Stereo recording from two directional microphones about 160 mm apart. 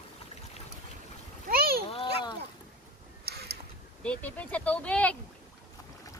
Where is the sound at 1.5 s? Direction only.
70° right (ahead or behind).